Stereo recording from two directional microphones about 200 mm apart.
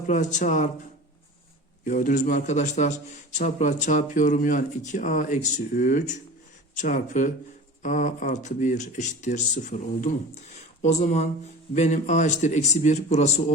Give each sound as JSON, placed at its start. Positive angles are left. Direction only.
{"t": 0.1, "sound": "a man's voice", "side_deg": 40}
{"t": 1.8, "sound": "a man's voice", "side_deg": 40}